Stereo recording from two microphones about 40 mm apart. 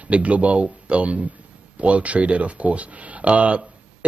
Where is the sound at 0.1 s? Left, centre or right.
Right.